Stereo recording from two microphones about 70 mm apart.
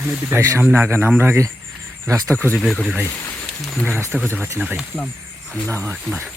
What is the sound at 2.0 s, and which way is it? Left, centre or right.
Speech, right.